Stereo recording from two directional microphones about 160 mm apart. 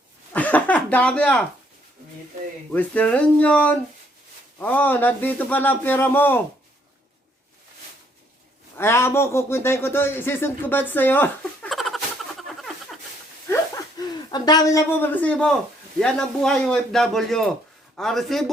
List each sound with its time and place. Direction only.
0.3 s speech: 10° left (ahead or behind)
2.7 s speech: 10° left (ahead or behind)
8.8 s speech: 15° left (ahead or behind)
11.7 s a sound: centre (ahead or behind)
13.5 s wheeze: 15° left (ahead or behind)
14.0 s a man's voice: 25° left (ahead or behind); by 18.5 s centre (ahead or behind)